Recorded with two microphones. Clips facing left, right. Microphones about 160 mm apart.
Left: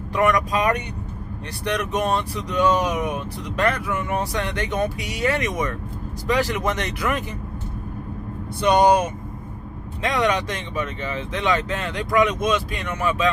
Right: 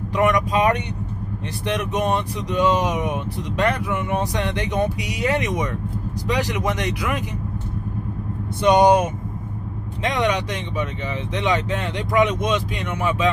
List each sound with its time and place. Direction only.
0.2 s speech: 20° right (ahead or behind)
8.5 s speech: 20° right (ahead or behind)